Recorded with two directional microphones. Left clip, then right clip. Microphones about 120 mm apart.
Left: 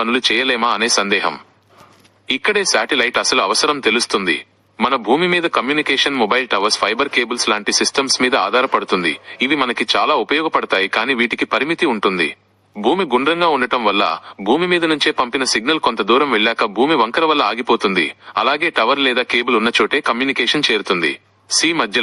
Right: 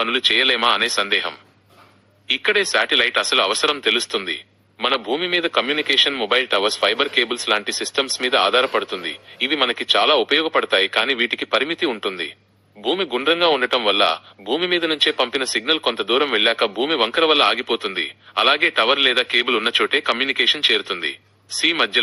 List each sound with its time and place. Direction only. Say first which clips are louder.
0.0 s a man's voice: left 1 dB; 20° right (ahead or behind)